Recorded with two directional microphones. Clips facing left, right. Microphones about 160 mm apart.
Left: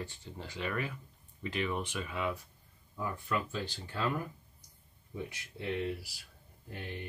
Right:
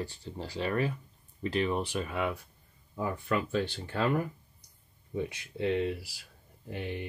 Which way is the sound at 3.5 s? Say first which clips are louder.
Right 8 dB; 65° right (ahead or behind).